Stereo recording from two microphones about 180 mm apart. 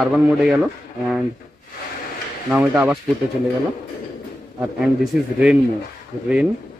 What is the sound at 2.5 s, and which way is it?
Speech, 10° right (ahead or behind).